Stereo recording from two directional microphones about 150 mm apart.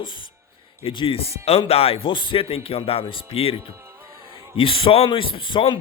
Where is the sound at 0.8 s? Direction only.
35° left (ahead or behind).